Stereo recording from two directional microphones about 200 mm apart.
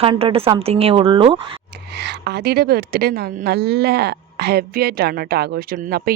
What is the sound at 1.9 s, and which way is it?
A woman's voice, 55° right (ahead or behind).